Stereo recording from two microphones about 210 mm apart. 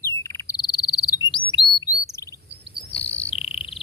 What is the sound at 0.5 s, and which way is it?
Chirp, 20° left (ahead or behind).